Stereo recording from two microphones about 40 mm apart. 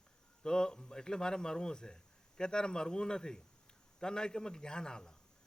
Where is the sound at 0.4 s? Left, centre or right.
Centre.